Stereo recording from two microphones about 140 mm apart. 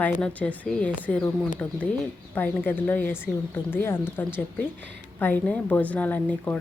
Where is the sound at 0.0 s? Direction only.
10° left (ahead or behind).